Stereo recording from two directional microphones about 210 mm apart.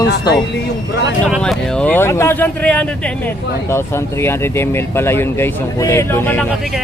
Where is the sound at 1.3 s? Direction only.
Centre (ahead or behind).